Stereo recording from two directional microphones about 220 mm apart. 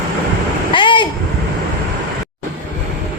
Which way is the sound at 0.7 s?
20° left (ahead or behind).